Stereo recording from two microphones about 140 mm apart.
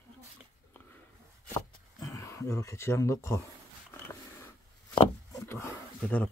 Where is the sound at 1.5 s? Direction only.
20° left (ahead or behind).